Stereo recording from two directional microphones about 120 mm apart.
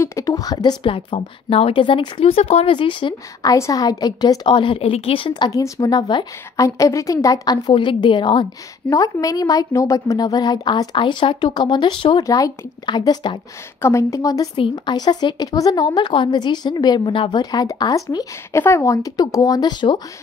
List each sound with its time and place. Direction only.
0.0 s speech: 25° left (ahead or behind)
0.8 s a woman's voice: 50° left (ahead or behind)
3.5 s speech: 25° left (ahead or behind); by 5.3 s 50° left (ahead or behind)
5.3 s speech: 35° left (ahead or behind)
6.6 s speech: 25° left (ahead or behind)
7.7 s a woman's voice: 45° left (ahead or behind)
8.9 s speech: 30° left (ahead or behind)
12.2 s speech: 30° left (ahead or behind)
13.7 s speech: 20° left (ahead or behind); by 17.4 s 45° left (ahead or behind)
17.4 s speech: 35° left (ahead or behind)